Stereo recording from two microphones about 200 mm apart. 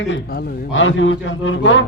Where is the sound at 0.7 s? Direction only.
70° left (ahead or behind).